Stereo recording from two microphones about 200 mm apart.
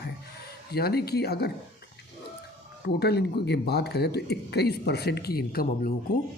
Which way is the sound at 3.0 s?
55° left (ahead or behind).